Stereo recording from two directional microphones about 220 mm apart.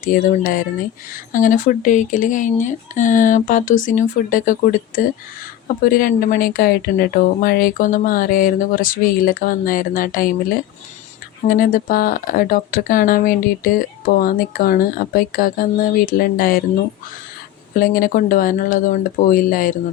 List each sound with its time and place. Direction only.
0.0 s speech: 40° left (ahead or behind)
11.4 s speech: 40° left (ahead or behind)
17.7 s speech: 40° left (ahead or behind)